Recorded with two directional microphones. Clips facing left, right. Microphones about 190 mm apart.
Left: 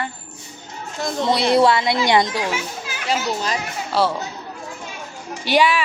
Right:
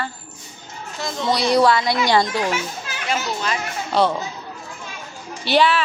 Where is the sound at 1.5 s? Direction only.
25° left (ahead or behind).